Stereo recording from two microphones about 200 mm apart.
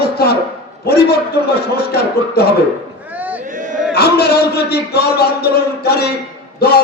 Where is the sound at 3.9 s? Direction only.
50° left (ahead or behind).